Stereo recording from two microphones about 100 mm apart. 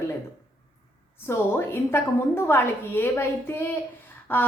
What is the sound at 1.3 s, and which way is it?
A woman's voice, 25° left (ahead or behind).